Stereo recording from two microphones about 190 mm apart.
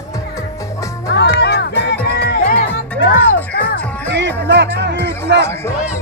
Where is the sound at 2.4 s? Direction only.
45° left (ahead or behind).